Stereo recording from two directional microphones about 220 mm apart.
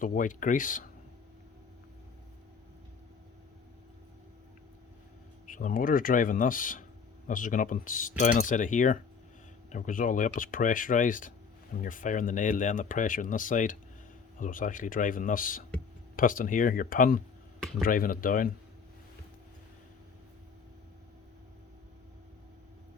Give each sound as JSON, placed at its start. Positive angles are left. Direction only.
{"t": 0.0, "sound": "speech", "side_deg": 35}
{"t": 5.5, "sound": "speech", "side_deg": 35}